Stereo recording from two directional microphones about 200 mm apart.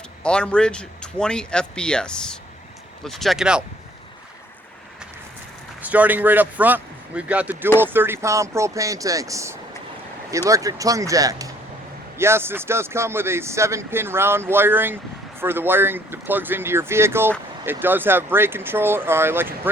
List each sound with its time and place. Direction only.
0.2 s a man's voice: 5° left (ahead or behind)
5.8 s speech: 5° right (ahead or behind)